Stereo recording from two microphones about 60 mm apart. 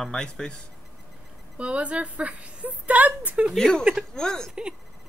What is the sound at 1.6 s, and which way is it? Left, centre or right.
A woman's voice, right.